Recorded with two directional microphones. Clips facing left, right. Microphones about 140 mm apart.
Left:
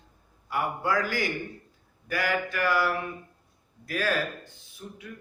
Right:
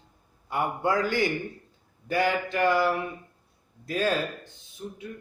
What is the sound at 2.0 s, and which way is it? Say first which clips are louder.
A man's voice: right 3 dB; 25° right (ahead or behind).